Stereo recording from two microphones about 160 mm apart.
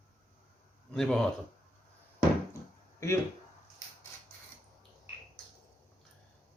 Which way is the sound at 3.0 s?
20° left (ahead or behind).